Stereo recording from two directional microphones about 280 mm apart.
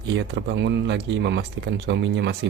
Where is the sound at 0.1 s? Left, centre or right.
Right.